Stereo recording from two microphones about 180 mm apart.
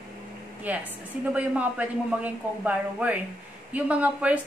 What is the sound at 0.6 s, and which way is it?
A woman's voice, 10° right (ahead or behind).